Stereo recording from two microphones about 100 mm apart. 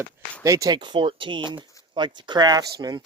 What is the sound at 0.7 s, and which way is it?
Speech, 50° right (ahead or behind).